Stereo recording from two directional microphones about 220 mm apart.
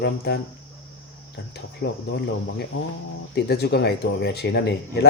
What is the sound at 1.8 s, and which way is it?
Speech, 50° left (ahead or behind).